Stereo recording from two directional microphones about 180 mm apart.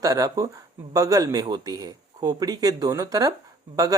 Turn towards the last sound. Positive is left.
turn(degrees=-20)  # may be behind; listen again after turning